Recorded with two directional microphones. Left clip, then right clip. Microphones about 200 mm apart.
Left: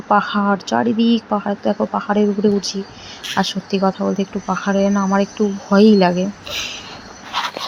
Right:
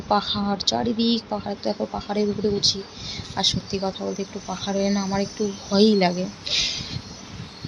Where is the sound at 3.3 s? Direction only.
25° left (ahead or behind).